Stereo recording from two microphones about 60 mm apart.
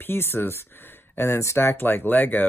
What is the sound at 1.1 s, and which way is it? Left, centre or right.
Speech, left.